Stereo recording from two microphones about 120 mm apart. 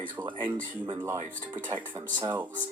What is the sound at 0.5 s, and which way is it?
Speech, 25° right (ahead or behind).